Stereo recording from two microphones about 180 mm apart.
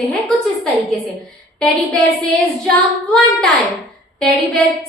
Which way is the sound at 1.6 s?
5° left (ahead or behind).